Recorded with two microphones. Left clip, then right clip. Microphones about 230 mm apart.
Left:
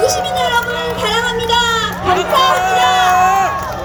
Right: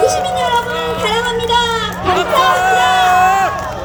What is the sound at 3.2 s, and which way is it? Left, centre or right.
Run, right.